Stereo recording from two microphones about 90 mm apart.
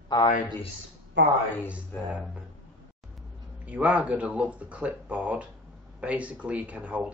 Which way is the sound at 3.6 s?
15° right (ahead or behind).